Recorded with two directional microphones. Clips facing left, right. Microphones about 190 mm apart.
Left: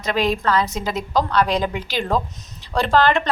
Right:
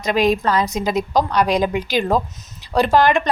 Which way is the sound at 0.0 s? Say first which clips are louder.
Right 3 dB; 15° right (ahead or behind).